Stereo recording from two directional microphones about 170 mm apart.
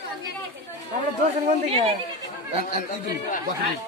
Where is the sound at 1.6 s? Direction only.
35° right (ahead or behind).